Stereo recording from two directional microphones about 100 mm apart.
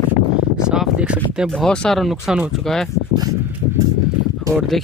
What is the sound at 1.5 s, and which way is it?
Speech, 5° left (ahead or behind).